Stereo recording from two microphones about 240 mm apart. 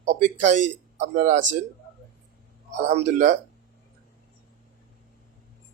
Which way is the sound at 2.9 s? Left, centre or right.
Right.